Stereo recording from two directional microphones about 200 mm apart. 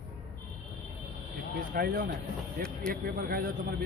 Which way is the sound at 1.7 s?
50° right (ahead or behind).